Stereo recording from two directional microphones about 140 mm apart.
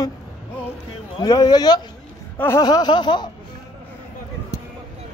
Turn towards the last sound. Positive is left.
turn(degrees=30)  # may be behind; listen again after turning